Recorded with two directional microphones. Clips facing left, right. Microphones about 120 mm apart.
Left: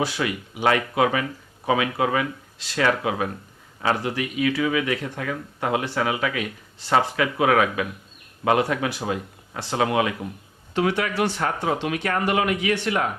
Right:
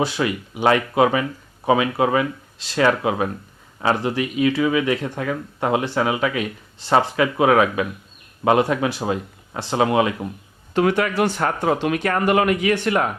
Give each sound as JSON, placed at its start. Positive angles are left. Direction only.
{"t": 0.0, "sound": "speech", "side_deg": -30}
{"t": 10.8, "sound": "speech", "side_deg": -50}